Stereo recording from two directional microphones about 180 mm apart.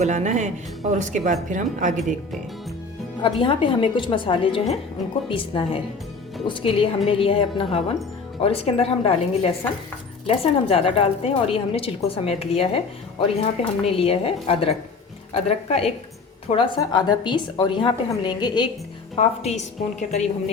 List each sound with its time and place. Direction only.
0.0 s a woman's voice: 40° right (ahead or behind)
3.2 s a woman's voice: 30° left (ahead or behind)
19.1 s a woman's voice: 35° left (ahead or behind)